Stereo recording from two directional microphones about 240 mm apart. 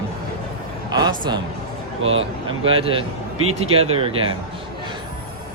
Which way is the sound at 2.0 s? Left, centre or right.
Right.